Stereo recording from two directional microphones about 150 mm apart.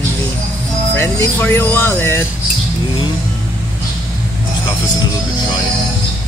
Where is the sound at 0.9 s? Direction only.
15° left (ahead or behind).